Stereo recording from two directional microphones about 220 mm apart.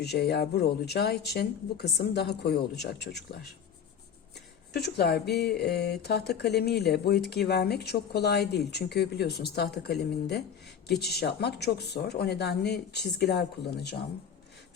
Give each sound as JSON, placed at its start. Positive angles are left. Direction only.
{"t": 0.0, "sound": "speech", "side_deg": 50}
{"t": 4.7, "sound": "speech", "side_deg": 45}